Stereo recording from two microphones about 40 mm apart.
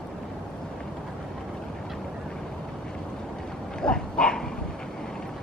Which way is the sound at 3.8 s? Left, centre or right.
Left.